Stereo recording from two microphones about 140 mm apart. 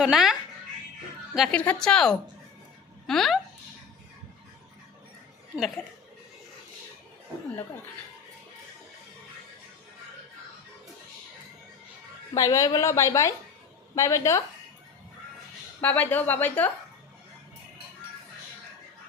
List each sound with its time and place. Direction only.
0.0 s a woman's voice: 5° right (ahead or behind)
1.4 s a woman's voice: 5° left (ahead or behind)
5.5 s a woman's voice: centre (ahead or behind)
12.3 s a woman's voice: 25° left (ahead or behind)
15.8 s a woman's voice: 10° left (ahead or behind)